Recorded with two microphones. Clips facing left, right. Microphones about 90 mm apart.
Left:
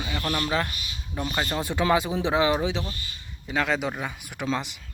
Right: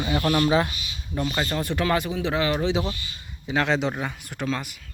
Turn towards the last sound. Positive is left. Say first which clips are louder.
# even
turn(degrees=20)  # may be behind; listen again after turning